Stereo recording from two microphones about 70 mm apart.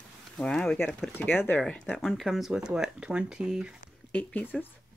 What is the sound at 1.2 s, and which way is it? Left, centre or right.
Speech, left.